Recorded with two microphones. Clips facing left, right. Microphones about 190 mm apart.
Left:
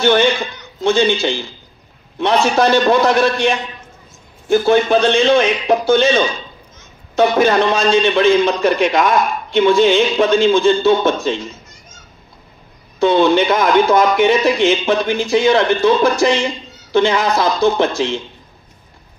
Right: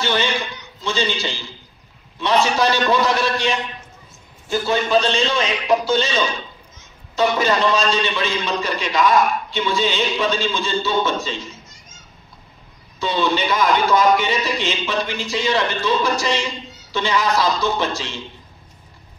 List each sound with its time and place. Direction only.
0.0 s a man's voice: 55° left (ahead or behind)
13.0 s a man's voice: 55° left (ahead or behind)